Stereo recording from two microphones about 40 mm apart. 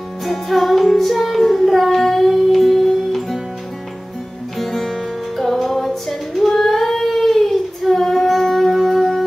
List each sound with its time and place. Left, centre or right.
0.2 s music: centre
4.6 s music: centre